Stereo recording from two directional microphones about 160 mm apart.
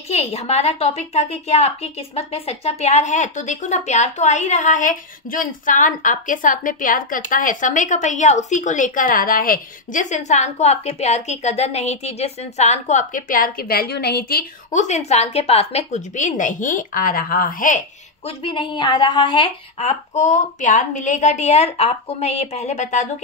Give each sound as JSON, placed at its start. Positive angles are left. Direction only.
{"t": 0.1, "sound": "a woman's voice", "side_deg": 40}
{"t": 14.7, "sound": "a woman's voice", "side_deg": 50}
{"t": 18.2, "sound": "a woman's voice", "side_deg": 35}